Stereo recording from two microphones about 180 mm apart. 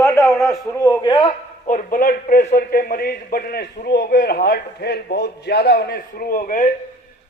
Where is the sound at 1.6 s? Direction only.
45° left (ahead or behind).